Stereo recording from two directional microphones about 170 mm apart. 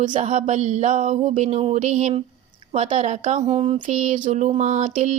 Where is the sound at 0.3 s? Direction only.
45° right (ahead or behind).